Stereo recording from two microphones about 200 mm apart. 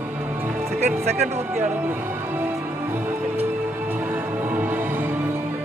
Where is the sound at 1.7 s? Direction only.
10° right (ahead or behind).